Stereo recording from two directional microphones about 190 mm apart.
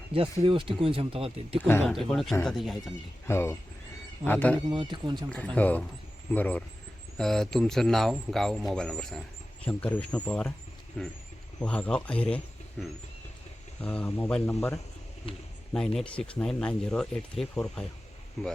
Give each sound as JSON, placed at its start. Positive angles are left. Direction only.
{"t": 0.1, "sound": "speech", "side_deg": -30}
{"t": 1.6, "sound": "speech", "side_deg": 10}
{"t": 3.2, "sound": "speech", "side_deg": 15}
{"t": 4.7, "sound": "speech", "side_deg": -25}
{"t": 5.5, "sound": "speech", "side_deg": 10}
{"t": 15.3, "sound": "a man's voice", "side_deg": 30}
{"t": 15.7, "sound": "speech", "side_deg": 0}